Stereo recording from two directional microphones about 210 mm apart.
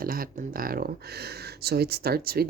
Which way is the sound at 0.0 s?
45° right (ahead or behind).